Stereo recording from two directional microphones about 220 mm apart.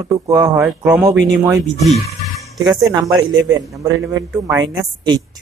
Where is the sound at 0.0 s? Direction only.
15° right (ahead or behind).